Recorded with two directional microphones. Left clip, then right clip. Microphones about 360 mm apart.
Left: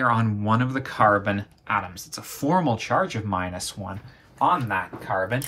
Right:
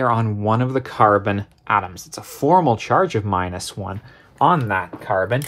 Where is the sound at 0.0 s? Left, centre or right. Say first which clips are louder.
Right 3 dB; centre.